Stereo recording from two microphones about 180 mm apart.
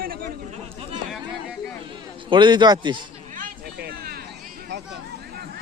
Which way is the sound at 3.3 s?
55° right (ahead or behind).